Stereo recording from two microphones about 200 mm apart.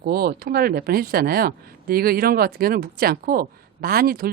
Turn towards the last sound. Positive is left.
turn(degrees=-50)  # may be behind; listen again after turning